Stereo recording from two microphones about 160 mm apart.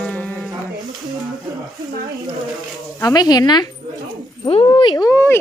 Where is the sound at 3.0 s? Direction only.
25° left (ahead or behind).